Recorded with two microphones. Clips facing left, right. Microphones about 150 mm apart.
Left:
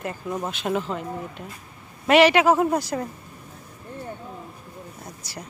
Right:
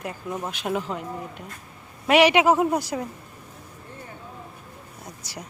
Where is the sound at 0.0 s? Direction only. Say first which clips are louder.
Left 2 dB; centre (ahead or behind).